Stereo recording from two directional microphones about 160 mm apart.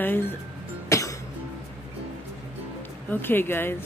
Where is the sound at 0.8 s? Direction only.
20° left (ahead or behind).